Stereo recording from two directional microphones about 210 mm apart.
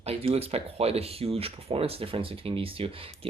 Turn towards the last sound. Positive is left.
turn(degrees=-25)  # may be behind; listen again after turning